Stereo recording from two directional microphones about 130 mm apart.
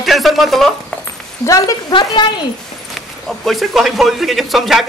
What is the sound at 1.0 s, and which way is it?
Speech, 25° left (ahead or behind).